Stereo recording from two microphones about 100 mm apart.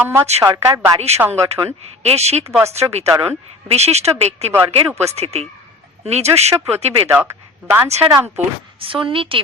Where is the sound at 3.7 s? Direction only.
90° right.